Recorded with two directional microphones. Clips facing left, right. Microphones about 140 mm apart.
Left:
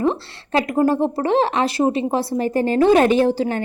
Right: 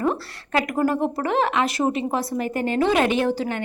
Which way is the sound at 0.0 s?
25° left (ahead or behind).